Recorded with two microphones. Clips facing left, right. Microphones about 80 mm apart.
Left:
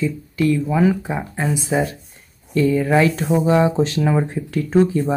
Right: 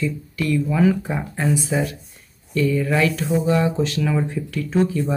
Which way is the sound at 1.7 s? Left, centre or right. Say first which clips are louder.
Left 3 dB; left.